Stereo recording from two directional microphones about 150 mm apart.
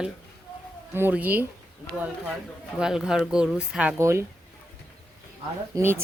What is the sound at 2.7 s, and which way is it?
A woman's voice, 5° right (ahead or behind).